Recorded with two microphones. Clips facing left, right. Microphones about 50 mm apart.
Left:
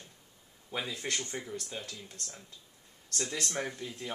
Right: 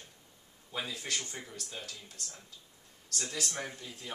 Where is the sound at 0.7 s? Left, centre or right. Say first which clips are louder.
Left 2 dB; left.